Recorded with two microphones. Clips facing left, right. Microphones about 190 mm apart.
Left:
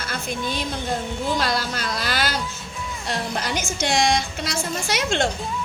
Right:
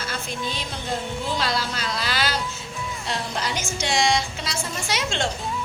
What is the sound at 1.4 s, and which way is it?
Speech, 45° left (ahead or behind).